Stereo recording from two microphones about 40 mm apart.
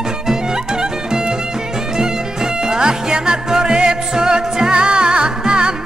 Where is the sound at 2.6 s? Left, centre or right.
Centre.